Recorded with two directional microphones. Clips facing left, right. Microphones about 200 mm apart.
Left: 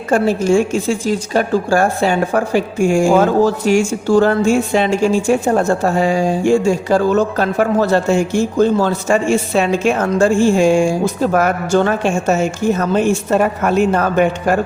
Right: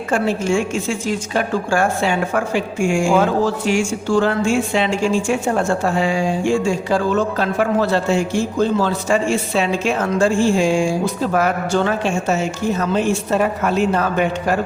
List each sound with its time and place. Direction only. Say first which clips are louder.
0.1 s a woman's voice: left 5 dB; 40° left (ahead or behind)